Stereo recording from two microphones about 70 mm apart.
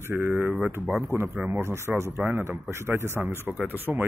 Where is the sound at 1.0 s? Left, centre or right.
Right.